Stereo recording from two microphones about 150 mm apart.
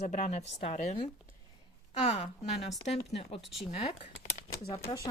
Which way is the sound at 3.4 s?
Centre (ahead or behind).